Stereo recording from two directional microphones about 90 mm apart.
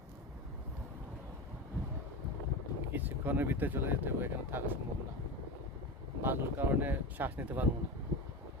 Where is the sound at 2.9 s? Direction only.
20° right (ahead or behind).